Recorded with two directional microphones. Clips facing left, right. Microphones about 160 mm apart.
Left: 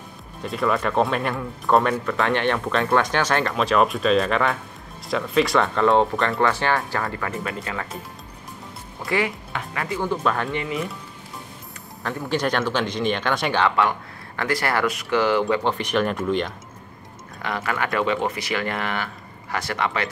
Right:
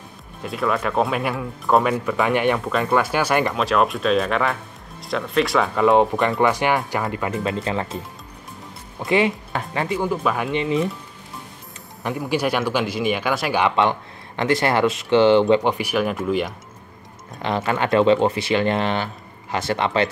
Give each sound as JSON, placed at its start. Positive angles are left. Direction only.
{"t": 0.4, "sound": "speech", "side_deg": 0}
{"t": 3.5, "sound": "speech", "side_deg": 0}
{"t": 9.0, "sound": "speech", "side_deg": -20}
{"t": 10.0, "sound": "speech", "side_deg": -10}
{"t": 10.5, "sound": "speech", "side_deg": -25}
{"t": 12.0, "sound": "speech", "side_deg": -10}
{"t": 15.8, "sound": "speech", "side_deg": -5}
{"t": 17.4, "sound": "speech", "side_deg": -25}